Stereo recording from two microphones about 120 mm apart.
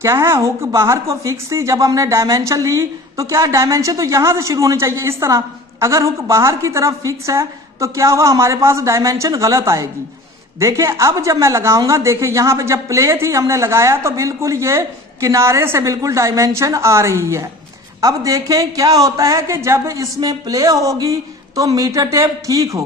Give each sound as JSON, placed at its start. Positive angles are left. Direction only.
{"t": 0.0, "sound": "a woman's voice", "side_deg": -25}